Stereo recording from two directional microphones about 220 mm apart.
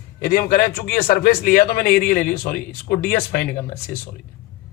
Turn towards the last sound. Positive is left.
turn(degrees=40)  # may be behind; listen again after turning